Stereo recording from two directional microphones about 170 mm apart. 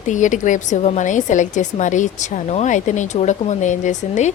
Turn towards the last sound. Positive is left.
turn(degrees=45)  # may be behind; listen again after turning